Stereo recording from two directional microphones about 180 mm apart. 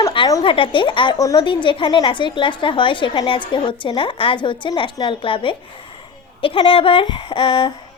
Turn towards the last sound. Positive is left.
turn(degrees=30)  # may be behind; listen again after turning